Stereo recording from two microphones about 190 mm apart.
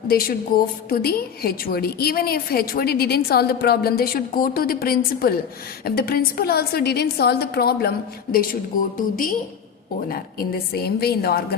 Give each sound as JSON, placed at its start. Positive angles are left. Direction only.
{"t": 0.1, "sound": "a woman's voice", "side_deg": 50}